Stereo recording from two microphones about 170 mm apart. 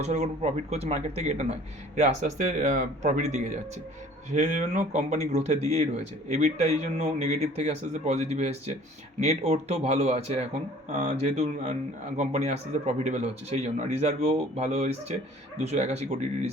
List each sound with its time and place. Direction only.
0.0 s speech: 40° right (ahead or behind)